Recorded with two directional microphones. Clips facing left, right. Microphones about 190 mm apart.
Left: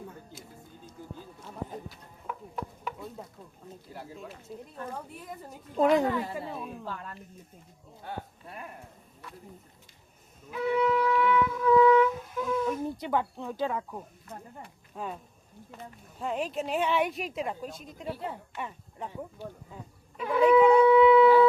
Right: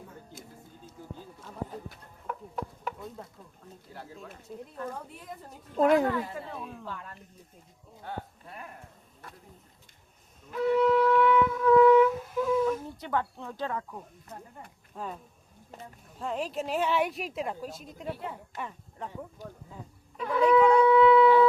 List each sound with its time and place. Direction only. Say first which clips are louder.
2.8 s chopping: even; centre (ahead or behind)
3.9 s speech: left 2 dB; 15° left (ahead or behind)
5.2 s a woman's voice: left 2 dB; centre (ahead or behind)
6.3 s speech: left 2 dB; 10° left (ahead or behind)
9.2 s a sound: left 2 dB; 50° right (ahead or behind)
10.5 s shofar: right 3 dB; centre (ahead or behind)
13.0 s a woman's voice: left 2 dB; 15° left (ahead or behind)
16.2 s a woman's voice: left 1 dB; 5° left (ahead or behind)
20.1 s shofar: left 2 dB; 5° left (ahead or behind)